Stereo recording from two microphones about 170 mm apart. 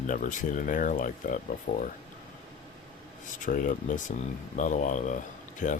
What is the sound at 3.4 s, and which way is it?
Speech, 50° left (ahead or behind).